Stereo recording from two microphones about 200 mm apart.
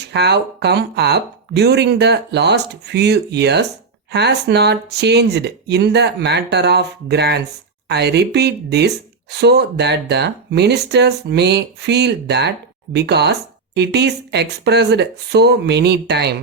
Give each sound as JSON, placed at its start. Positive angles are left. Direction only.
{"t": 0.0, "sound": "speech", "side_deg": -55}